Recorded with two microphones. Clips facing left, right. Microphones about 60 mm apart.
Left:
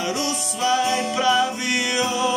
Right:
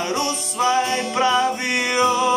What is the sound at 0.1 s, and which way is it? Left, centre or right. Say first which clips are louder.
Music: right 2 dB; right.